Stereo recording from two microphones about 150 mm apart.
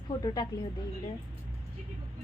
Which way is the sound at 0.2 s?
30° left (ahead or behind).